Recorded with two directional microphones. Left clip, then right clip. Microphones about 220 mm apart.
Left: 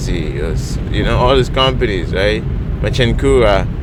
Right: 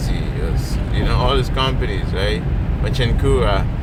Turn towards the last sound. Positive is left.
turn(degrees=45)  # may be behind; listen again after turning